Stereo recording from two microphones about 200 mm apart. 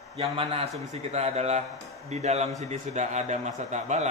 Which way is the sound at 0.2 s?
30° right (ahead or behind).